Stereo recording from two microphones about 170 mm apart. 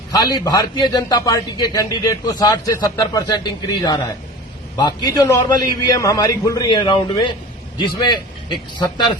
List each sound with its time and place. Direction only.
0.1 s a man's voice: 20° left (ahead or behind)